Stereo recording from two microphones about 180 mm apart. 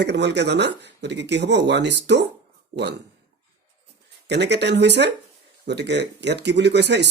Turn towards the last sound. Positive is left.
turn(degrees=-70)  # may be behind; listen again after turning